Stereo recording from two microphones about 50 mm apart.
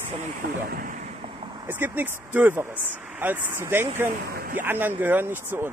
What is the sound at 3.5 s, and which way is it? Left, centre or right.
Speech, right.